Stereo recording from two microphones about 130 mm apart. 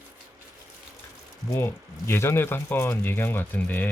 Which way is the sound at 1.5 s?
20° left (ahead or behind).